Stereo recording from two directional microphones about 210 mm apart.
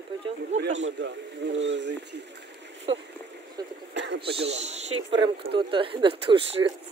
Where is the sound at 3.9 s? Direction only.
55° right (ahead or behind).